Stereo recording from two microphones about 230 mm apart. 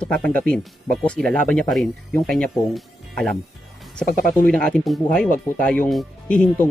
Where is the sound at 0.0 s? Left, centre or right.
Centre.